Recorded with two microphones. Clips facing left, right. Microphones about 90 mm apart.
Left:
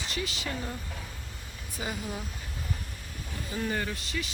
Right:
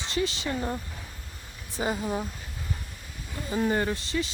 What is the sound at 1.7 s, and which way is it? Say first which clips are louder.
Speech: right 7 dB; 35° right (ahead or behind).